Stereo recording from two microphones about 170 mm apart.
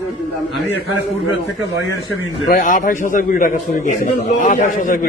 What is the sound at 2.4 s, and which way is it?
A man's voice, 55° left (ahead or behind).